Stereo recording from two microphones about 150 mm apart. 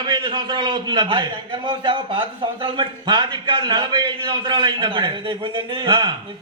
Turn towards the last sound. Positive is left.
turn(degrees=-30)  # may be behind; listen again after turning